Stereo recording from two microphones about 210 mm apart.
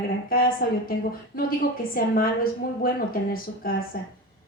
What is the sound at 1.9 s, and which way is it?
A woman's voice, 45° left (ahead or behind).